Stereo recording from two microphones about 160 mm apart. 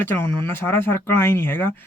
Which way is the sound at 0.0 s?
15° left (ahead or behind).